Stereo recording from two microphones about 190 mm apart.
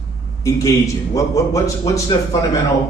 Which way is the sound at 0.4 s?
15° left (ahead or behind).